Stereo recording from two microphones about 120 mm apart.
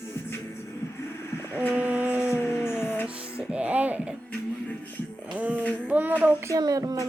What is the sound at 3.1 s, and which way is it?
Music, 10° right (ahead or behind).